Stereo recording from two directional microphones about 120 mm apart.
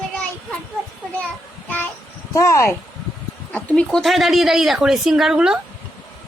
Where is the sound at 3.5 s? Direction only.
10° left (ahead or behind); by 5.6 s 5° right (ahead or behind).